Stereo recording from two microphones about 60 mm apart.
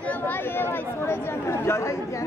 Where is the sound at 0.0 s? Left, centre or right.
Left.